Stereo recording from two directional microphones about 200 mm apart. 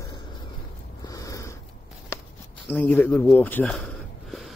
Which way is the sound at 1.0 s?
15° left (ahead or behind).